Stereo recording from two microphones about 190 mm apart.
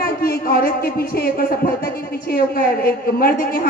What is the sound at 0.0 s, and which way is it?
Speech, 55° left (ahead or behind).